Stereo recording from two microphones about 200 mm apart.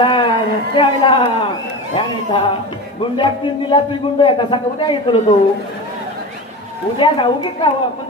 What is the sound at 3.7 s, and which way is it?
A man's voice, 25° left (ahead or behind).